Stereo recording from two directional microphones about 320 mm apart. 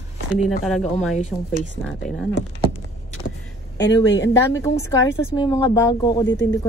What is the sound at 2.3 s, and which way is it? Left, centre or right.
Speech, right.